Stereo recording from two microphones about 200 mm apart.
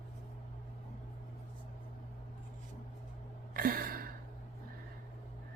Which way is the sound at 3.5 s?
45° right (ahead or behind).